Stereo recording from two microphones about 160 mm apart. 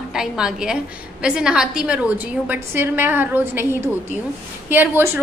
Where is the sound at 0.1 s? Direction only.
5° right (ahead or behind).